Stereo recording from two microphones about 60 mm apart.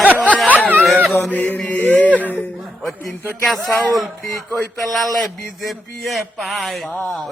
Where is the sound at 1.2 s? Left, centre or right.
Left.